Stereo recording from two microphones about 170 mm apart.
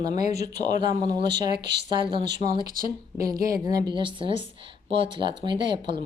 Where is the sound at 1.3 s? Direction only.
80° right.